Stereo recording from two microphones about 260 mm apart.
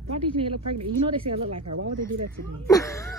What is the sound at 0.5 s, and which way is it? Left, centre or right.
Speech, right.